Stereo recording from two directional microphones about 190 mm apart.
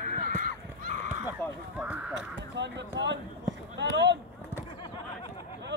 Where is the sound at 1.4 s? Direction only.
10° left (ahead or behind).